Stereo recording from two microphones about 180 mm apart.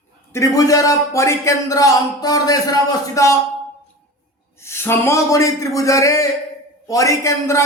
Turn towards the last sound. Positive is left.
turn(degrees=15)  # may be behind; listen again after turning